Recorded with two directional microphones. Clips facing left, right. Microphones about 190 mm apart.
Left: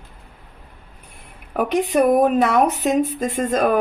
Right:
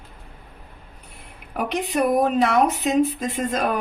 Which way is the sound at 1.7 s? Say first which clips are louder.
Left 5 dB; 50° left (ahead or behind).